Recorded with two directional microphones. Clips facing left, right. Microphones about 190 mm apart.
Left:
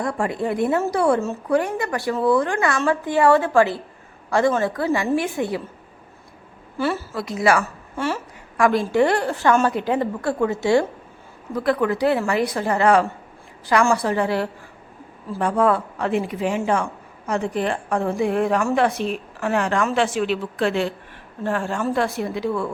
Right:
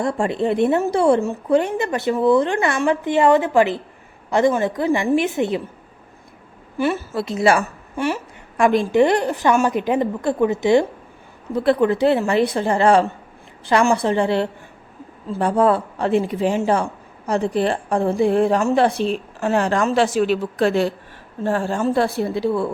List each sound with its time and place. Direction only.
0.0 s a woman's voice: 25° right (ahead or behind)
6.7 s a woman's voice: 20° right (ahead or behind)